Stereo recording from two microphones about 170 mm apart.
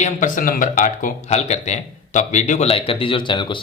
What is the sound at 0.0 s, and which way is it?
Speech, 50° left (ahead or behind).